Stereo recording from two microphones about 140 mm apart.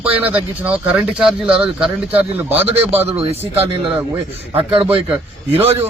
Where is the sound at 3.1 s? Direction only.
45° right (ahead or behind).